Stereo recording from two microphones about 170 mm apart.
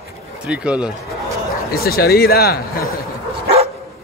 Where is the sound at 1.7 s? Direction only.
65° left (ahead or behind).